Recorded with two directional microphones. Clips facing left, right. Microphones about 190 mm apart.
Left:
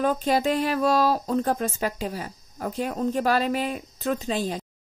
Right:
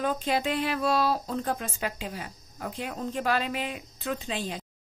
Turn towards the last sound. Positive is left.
turn(degrees=40)  # may be behind; listen again after turning